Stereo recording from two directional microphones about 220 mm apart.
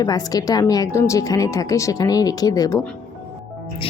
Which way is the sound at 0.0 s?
15° left (ahead or behind).